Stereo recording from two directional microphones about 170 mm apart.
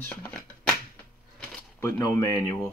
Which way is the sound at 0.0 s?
10° left (ahead or behind).